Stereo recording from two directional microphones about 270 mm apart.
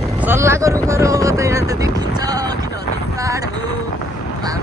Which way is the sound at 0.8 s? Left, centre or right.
Centre.